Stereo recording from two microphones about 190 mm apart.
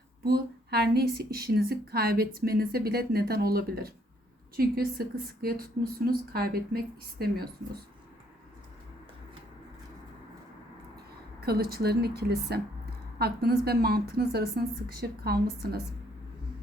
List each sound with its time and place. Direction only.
0.3 s a woman's voice: 55° right (ahead or behind)
11.3 s a woman's voice: 55° right (ahead or behind)